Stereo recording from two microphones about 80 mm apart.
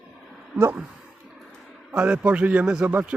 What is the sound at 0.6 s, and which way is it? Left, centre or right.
Speech, right.